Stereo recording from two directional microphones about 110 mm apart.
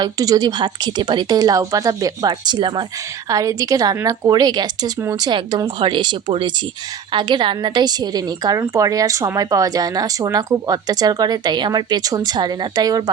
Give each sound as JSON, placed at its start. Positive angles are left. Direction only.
{"t": 0.0, "sound": "speech", "side_deg": -35}
{"t": 3.2, "sound": "a woman's voice", "side_deg": -30}